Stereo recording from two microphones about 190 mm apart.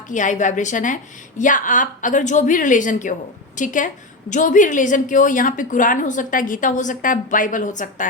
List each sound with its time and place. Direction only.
0.1 s a woman's voice: 40° left (ahead or behind)